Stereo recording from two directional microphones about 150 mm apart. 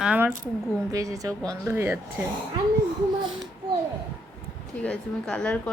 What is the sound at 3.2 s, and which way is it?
Speech, 30° right (ahead or behind).